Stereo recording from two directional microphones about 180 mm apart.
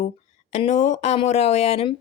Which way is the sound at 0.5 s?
40° left (ahead or behind).